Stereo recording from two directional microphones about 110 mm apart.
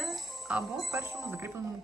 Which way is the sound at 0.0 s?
Centre (ahead or behind).